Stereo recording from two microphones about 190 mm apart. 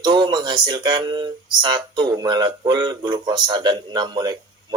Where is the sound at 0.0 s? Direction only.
25° right (ahead or behind).